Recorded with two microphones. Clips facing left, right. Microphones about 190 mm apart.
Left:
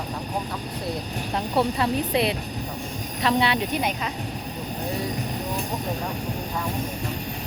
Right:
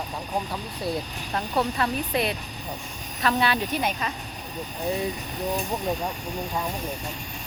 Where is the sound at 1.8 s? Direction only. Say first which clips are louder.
Left 3 dB; 25° left (ahead or behind).